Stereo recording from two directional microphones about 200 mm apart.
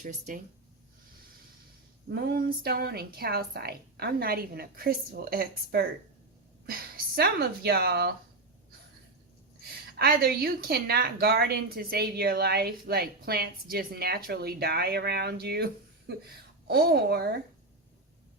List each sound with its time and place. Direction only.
0.0 s speech: 40° right (ahead or behind)
2.0 s a woman's voice: 55° right (ahead or behind)
10.0 s a woman's voice: 50° right (ahead or behind)